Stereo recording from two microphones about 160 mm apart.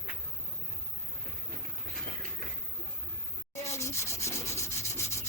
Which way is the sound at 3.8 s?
15° left (ahead or behind).